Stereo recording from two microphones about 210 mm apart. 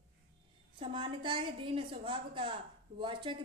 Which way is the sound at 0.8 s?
25° right (ahead or behind).